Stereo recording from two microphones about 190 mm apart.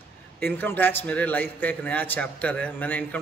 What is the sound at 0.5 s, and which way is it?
A man's voice, 10° left (ahead or behind).